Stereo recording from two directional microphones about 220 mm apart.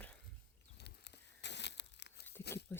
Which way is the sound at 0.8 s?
50° left (ahead or behind).